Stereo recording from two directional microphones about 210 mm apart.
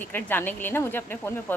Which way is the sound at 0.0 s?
10° left (ahead or behind).